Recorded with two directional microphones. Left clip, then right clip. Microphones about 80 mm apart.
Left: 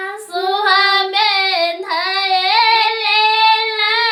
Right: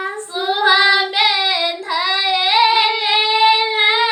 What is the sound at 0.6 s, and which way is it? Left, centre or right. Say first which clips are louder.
Child singing: right 1 dB; left.